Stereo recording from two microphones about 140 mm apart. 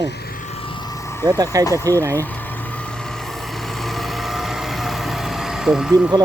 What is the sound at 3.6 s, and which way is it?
Vehicle, centre (ahead or behind).